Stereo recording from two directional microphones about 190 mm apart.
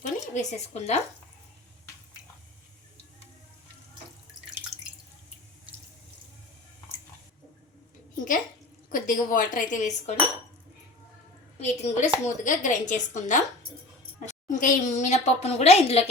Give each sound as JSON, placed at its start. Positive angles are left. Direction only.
{"t": 0.0, "sound": "speech", "side_deg": 35}
{"t": 8.1, "sound": "a sound", "side_deg": 45}
{"t": 8.9, "sound": "speech", "side_deg": 45}
{"t": 11.6, "sound": "a woman's voice", "side_deg": 40}